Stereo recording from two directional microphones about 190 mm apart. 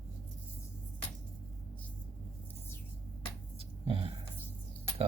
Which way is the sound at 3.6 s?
30° right (ahead or behind).